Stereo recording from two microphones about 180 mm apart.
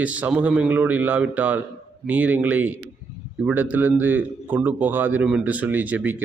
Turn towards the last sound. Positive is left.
turn(degrees=-10)  # may be behind; listen again after turning